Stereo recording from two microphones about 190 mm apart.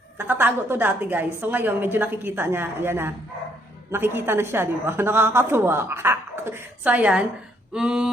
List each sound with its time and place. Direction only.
0.2 s a woman's voice: 10° right (ahead or behind)